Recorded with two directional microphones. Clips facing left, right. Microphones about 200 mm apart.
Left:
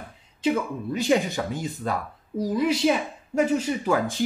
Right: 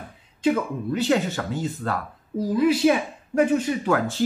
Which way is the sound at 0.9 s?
15° left (ahead or behind).